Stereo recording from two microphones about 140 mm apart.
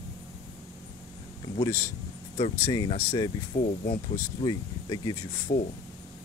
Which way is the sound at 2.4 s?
30° left (ahead or behind).